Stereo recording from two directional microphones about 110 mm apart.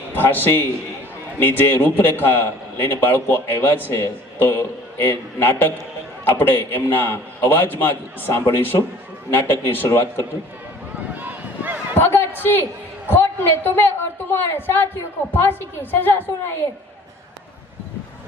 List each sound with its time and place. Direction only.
0.1 s a man's voice: 20° left (ahead or behind)
10.9 s a sound: 15° right (ahead or behind)
11.9 s a woman's voice: 20° left (ahead or behind)